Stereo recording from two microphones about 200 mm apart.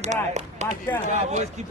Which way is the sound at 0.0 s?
35° right (ahead or behind).